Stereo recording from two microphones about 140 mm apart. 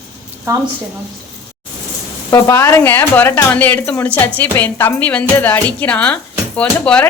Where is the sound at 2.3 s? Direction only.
20° left (ahead or behind).